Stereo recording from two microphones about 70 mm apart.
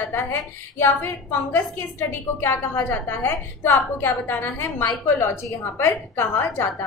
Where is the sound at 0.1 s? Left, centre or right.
Left.